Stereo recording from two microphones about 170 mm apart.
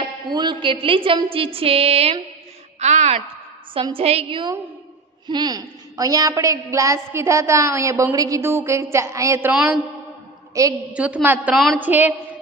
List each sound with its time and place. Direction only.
0.0 s a woman's voice: 25° right (ahead or behind); by 3.3 s 45° right (ahead or behind)
3.7 s a woman's voice: 30° right (ahead or behind)
9.5 s a woman's voice: 5° right (ahead or behind)
10.6 s a woman's voice: 20° right (ahead or behind)
10.9 s a woman's voice: 10° right (ahead or behind)